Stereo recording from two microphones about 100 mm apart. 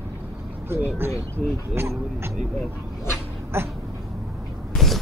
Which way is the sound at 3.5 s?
25° right (ahead or behind).